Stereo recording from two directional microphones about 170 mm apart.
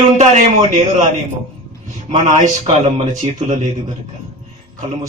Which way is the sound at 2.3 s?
45° right (ahead or behind).